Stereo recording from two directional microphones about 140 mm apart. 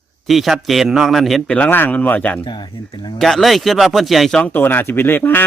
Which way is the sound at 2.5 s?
30° left (ahead or behind).